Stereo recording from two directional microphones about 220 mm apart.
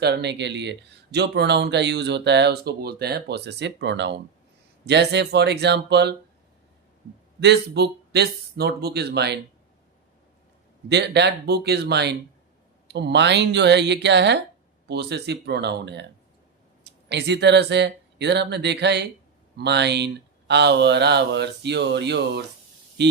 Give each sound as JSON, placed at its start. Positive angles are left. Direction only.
{"t": 0.0, "sound": "speech", "side_deg": -50}
{"t": 7.3, "sound": "speech", "side_deg": -50}
{"t": 10.8, "sound": "speech", "side_deg": -50}